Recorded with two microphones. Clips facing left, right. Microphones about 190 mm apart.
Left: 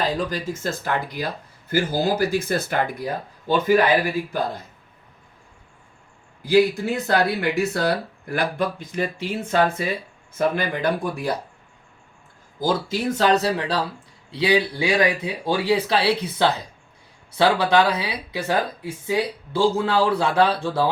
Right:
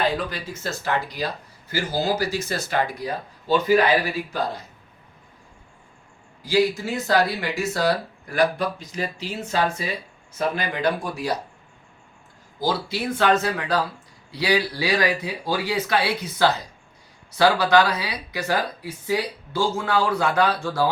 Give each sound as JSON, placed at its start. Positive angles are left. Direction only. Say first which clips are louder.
{"t": 0.0, "sound": "speech", "louder": "left 1 dB", "side_deg": 40}
{"t": 6.4, "sound": "speech", "louder": "left 3 dB", "side_deg": 60}
{"t": 12.5, "sound": "speech", "louder": "left 2 dB", "side_deg": 45}